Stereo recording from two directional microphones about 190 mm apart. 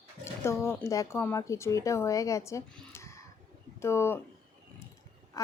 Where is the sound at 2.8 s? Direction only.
15° left (ahead or behind).